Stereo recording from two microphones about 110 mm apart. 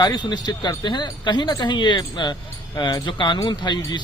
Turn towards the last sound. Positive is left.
turn(degrees=45)  # may be behind; listen again after turning